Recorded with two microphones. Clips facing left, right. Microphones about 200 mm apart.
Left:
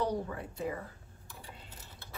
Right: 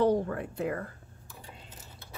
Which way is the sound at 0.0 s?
55° right (ahead or behind).